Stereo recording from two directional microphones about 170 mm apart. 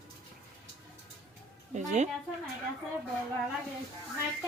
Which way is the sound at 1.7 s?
45° right (ahead or behind).